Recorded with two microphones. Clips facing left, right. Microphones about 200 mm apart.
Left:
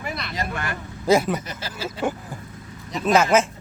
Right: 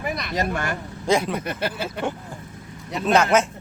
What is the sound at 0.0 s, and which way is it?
Vehicle, 15° right (ahead or behind).